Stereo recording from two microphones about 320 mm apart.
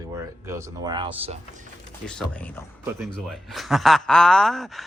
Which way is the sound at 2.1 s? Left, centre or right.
Centre.